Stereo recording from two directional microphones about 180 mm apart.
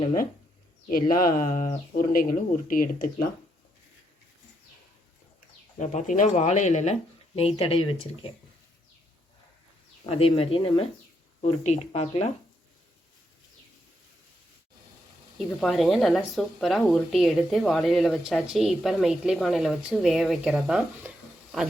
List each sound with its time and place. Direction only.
0.9 s speech: 50° left (ahead or behind)
5.8 s speech: 40° left (ahead or behind)
10.1 s speech: 35° left (ahead or behind)
15.4 s speech: centre (ahead or behind)